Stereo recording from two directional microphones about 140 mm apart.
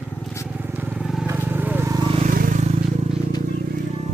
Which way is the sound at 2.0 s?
35° right (ahead or behind).